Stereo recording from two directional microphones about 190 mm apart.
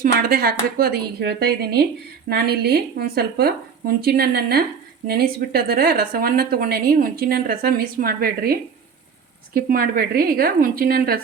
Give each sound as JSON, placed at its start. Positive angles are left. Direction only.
{"t": 0.0, "sound": "a woman's voice", "side_deg": -50}
{"t": 9.6, "sound": "a woman's voice", "side_deg": -50}